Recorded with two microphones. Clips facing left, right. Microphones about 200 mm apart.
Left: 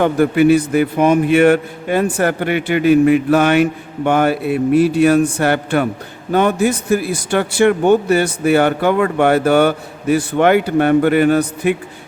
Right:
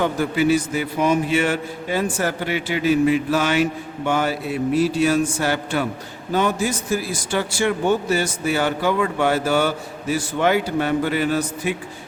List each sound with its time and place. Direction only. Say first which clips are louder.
0.0 s a man's voice: left 7 dB; 60° left (ahead or behind)